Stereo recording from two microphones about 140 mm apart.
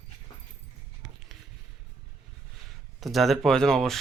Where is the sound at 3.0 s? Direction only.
Centre (ahead or behind).